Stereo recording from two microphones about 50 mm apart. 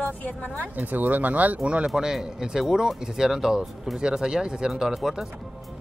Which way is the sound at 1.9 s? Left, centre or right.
Centre.